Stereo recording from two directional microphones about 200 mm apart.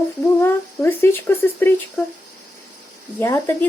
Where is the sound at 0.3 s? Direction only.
10° left (ahead or behind).